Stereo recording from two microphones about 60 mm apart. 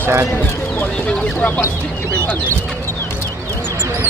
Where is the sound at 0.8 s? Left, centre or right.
Left.